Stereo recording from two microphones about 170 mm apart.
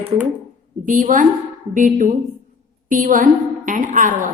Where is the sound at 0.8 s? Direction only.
50° right (ahead or behind).